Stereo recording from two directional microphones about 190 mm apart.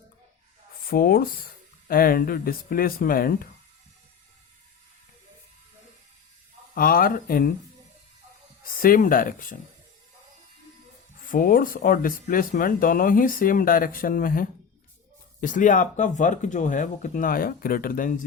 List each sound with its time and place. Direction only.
0.9 s speech: 50° left (ahead or behind)
6.7 s speech: 50° left (ahead or behind)
8.6 s speech: 50° left (ahead or behind)
11.3 s speech: 50° left (ahead or behind)